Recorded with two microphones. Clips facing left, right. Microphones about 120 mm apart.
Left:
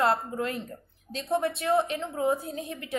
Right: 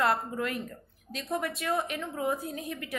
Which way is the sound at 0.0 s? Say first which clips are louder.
Left 2 dB; 30° left (ahead or behind).